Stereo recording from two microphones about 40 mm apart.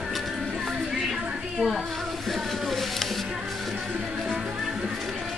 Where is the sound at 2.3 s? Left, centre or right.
Centre.